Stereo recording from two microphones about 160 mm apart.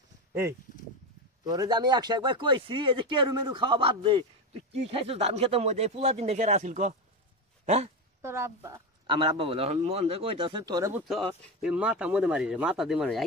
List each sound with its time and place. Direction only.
0.3 s a man's voice: 20° right (ahead or behind); by 7.9 s 45° right (ahead or behind)
8.2 s speech: 15° right (ahead or behind)
9.0 s a man's voice: 30° right (ahead or behind)
11.1 s speech: centre (ahead or behind)